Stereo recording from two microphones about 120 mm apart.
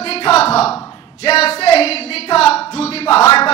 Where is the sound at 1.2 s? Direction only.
55° left (ahead or behind).